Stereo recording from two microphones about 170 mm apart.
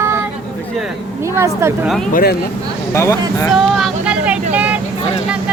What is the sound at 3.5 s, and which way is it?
Vehicle, 5° right (ahead or behind).